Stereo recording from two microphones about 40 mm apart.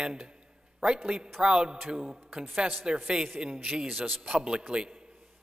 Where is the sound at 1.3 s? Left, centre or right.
Right.